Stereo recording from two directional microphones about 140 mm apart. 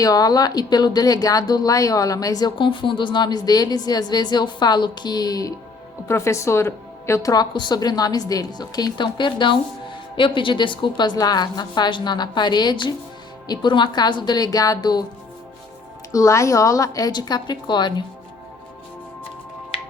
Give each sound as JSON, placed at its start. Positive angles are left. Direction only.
{"t": 0.0, "sound": "a woman's voice", "side_deg": 25}
{"t": 16.1, "sound": "speech", "side_deg": 20}